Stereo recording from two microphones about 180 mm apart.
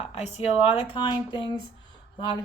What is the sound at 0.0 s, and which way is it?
A woman's voice, 35° left (ahead or behind).